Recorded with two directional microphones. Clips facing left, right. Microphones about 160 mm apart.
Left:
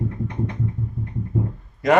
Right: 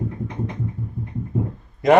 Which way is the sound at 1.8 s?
20° right (ahead or behind).